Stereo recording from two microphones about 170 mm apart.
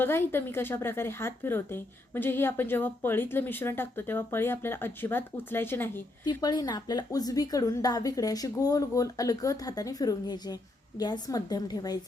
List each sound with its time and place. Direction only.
0.0 s speech: 15° left (ahead or behind)
6.2 s a woman's voice: 25° left (ahead or behind)